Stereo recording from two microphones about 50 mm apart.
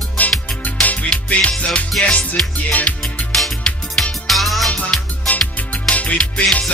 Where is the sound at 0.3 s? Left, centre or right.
Left.